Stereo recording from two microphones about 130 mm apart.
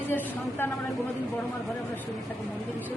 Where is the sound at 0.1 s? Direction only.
15° left (ahead or behind).